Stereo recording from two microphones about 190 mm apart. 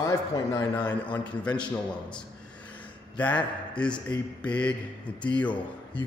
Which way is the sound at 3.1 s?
5° left (ahead or behind).